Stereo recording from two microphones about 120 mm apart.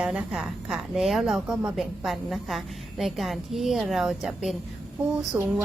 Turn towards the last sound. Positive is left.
turn(degrees=-15)  # may be behind; listen again after turning